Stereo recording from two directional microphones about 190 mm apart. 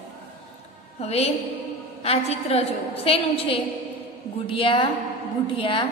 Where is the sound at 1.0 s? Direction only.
35° left (ahead or behind).